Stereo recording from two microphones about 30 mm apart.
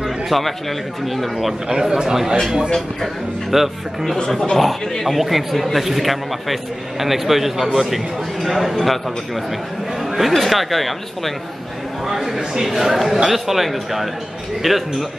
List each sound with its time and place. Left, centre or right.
0.3 s a man's voice: centre
1.7 s a man's voice: right
3.5 s speech: centre
4.3 s speech: centre
5.0 s a man's voice: centre
12.1 s a man's voice: centre